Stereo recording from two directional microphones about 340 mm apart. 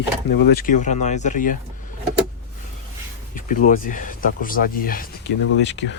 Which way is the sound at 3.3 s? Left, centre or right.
Left.